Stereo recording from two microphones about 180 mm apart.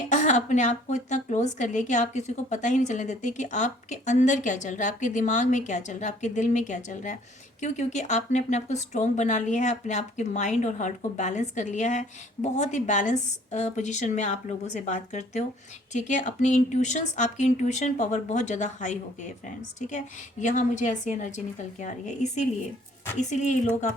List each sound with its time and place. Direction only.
0.1 s a woman's voice: 40° left (ahead or behind)